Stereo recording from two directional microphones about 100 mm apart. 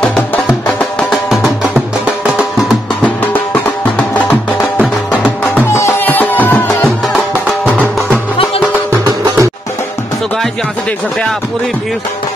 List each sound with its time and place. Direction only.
0.0 s music: 15° left (ahead or behind)
1.7 s music: 10° right (ahead or behind)
3.0 s music: 15° left (ahead or behind)
9.0 s music: 35° right (ahead or behind)